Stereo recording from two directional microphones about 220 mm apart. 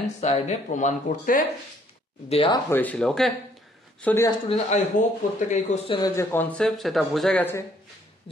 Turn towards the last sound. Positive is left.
turn(degrees=10)  # may be behind; listen again after turning